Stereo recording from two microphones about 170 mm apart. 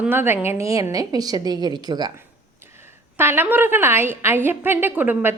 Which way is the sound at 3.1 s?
15° right (ahead or behind).